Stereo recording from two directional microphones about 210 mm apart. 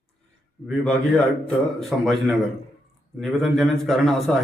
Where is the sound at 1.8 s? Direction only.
Centre (ahead or behind).